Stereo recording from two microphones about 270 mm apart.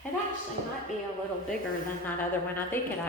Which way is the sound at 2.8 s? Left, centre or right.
Centre.